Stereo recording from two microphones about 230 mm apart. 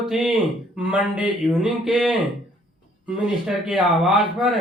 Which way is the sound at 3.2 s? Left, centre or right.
Centre.